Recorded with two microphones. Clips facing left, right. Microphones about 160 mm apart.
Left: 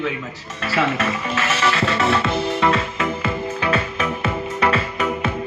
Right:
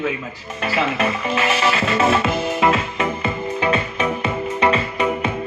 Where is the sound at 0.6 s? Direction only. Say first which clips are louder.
Even; 15° right (ahead or behind).